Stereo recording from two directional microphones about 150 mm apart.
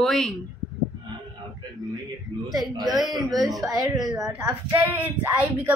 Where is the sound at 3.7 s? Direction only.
25° right (ahead or behind).